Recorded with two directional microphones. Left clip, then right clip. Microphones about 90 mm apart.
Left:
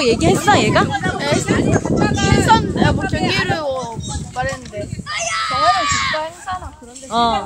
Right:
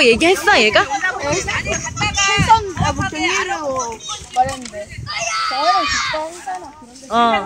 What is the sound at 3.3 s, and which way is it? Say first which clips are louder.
Speech: left 3 dB; 10° left (ahead or behind).